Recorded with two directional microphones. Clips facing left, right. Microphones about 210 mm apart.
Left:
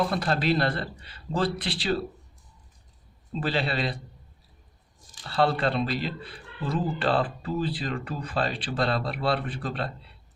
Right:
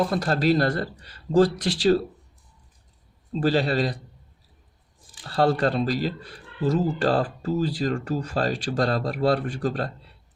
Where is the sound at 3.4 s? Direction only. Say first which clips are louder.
Right 6 dB; 45° right (ahead or behind).